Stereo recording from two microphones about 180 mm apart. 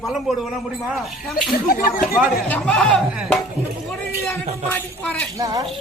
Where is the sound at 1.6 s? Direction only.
50° left (ahead or behind).